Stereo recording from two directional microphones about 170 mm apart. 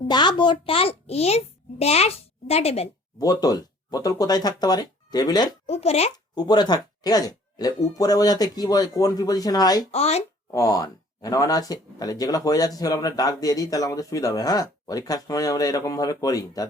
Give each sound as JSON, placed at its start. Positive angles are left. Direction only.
{"t": 0.1, "sound": "a child's voice", "side_deg": 25}
{"t": 3.2, "sound": "speech", "side_deg": 20}
{"t": 5.6, "sound": "speech", "side_deg": 35}
{"t": 6.3, "sound": "speech", "side_deg": 25}
{"t": 9.9, "sound": "speech", "side_deg": 35}
{"t": 10.5, "sound": "speech", "side_deg": 20}